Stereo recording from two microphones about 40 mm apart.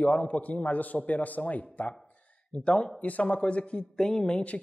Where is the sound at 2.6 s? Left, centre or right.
Left.